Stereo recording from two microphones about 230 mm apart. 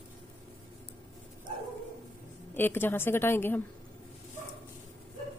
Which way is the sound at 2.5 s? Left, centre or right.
Centre.